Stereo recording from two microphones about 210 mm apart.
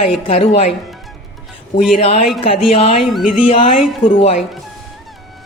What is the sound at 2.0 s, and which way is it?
Speech, 30° left (ahead or behind).